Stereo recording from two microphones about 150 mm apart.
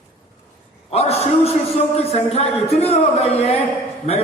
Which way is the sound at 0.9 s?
45° left (ahead or behind).